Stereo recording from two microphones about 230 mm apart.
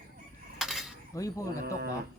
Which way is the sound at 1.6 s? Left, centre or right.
Right.